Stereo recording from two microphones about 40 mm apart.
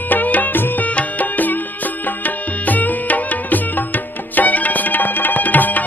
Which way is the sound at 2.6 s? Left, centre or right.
Left.